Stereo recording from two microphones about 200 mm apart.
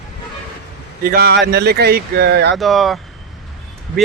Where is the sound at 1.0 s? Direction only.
50° right (ahead or behind).